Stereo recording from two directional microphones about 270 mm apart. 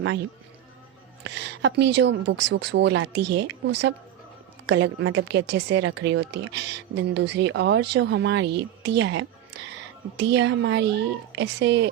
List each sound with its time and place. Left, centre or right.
1.5 s a woman's voice: right